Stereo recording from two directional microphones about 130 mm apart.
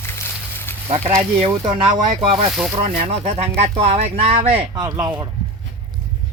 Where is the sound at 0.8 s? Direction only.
50° right (ahead or behind).